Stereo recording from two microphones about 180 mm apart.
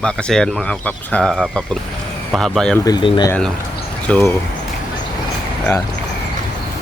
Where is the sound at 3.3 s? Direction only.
5° left (ahead or behind).